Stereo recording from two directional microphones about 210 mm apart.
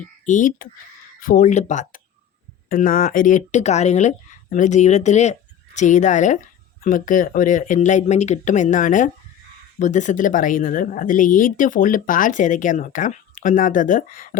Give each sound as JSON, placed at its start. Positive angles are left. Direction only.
{"t": 0.3, "sound": "speech", "side_deg": 35}